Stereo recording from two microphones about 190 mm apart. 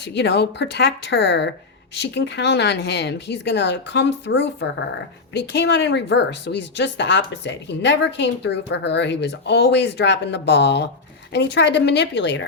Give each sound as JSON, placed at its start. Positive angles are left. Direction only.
{"t": 0.0, "sound": "speech", "side_deg": 65}